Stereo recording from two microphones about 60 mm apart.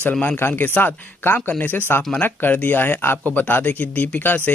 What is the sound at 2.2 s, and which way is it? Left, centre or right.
Speech, left.